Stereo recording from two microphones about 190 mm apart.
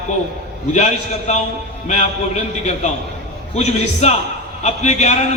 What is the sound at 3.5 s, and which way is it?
A man's voice, 35° left (ahead or behind).